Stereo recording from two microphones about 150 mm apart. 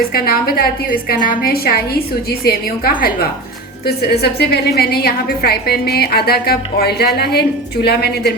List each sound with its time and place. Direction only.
0.1 s a woman's voice: 90° left